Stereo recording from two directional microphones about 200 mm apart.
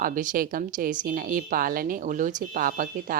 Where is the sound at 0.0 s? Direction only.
40° right (ahead or behind).